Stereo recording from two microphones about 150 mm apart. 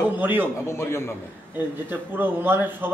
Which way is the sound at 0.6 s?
20° left (ahead or behind).